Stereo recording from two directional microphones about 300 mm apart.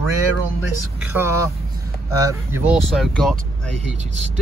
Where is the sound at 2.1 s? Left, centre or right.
Centre.